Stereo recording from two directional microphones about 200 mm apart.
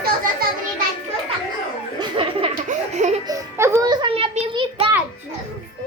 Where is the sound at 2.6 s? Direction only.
35° right (ahead or behind).